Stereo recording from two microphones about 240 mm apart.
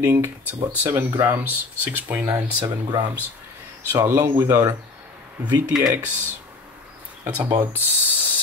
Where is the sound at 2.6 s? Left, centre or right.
Centre.